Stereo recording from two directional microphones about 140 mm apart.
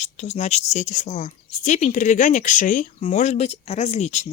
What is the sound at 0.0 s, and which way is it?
Speech, 50° left (ahead or behind).